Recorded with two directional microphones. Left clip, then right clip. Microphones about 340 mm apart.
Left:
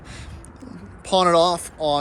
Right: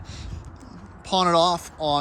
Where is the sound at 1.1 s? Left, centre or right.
Centre.